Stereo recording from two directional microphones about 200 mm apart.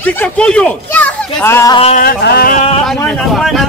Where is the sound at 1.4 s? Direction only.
10° left (ahead or behind).